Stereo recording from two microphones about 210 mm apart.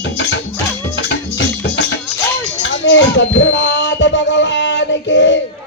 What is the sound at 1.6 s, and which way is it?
Music, 55° left (ahead or behind).